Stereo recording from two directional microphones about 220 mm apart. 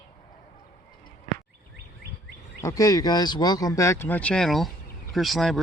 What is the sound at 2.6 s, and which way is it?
Speech, 15° left (ahead or behind).